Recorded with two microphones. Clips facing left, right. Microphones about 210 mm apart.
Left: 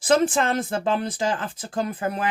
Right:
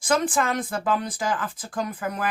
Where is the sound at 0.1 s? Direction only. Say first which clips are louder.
Left 3 dB; 25° left (ahead or behind).